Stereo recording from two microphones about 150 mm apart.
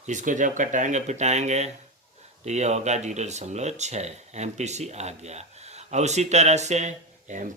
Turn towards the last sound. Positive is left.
turn(degrees=-55)  # may be behind; listen again after turning